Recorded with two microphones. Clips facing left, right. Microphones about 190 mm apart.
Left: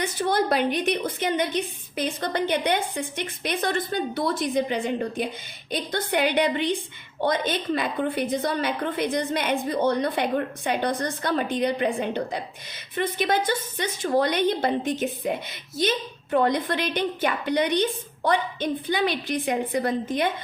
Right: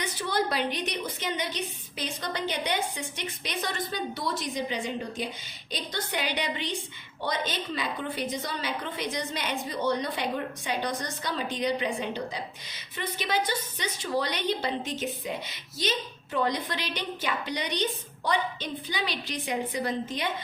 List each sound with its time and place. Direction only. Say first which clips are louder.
0.0 s a woman's voice: left 5 dB; 50° left (ahead or behind)